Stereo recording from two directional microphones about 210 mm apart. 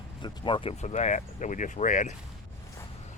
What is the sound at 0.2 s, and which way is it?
Speech, 25° left (ahead or behind).